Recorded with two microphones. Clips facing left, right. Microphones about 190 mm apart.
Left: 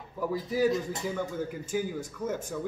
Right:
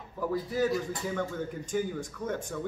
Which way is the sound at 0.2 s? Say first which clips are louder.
Left 2 dB; 10° left (ahead or behind).